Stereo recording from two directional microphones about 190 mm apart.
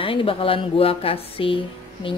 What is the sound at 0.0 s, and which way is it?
A woman's voice, 30° left (ahead or behind).